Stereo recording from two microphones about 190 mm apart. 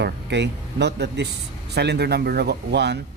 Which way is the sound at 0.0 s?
65° right (ahead or behind).